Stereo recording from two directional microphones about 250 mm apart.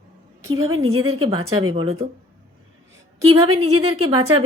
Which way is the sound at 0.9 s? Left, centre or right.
Right.